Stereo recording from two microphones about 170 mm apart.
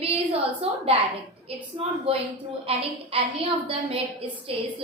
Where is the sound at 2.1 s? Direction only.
35° right (ahead or behind).